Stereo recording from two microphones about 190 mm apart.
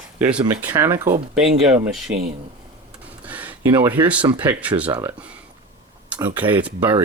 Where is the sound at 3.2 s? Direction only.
10° right (ahead or behind).